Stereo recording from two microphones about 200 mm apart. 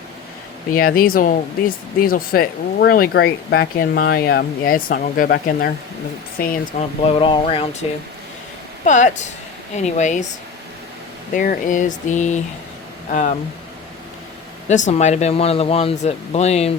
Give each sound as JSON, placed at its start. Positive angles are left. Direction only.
{"t": 0.7, "sound": "speech", "side_deg": 45}
{"t": 7.0, "sound": "speech", "side_deg": 25}
{"t": 11.3, "sound": "speech", "side_deg": 40}
{"t": 14.7, "sound": "speech", "side_deg": 35}